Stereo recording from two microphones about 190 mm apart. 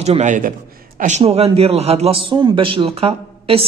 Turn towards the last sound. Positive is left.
turn(degrees=-30)  # may be behind; listen again after turning